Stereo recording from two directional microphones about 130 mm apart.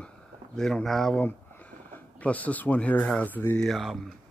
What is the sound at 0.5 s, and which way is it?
Speech, 5° left (ahead or behind).